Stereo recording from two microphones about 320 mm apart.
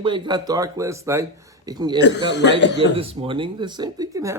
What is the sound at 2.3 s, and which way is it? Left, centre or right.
Speech, left.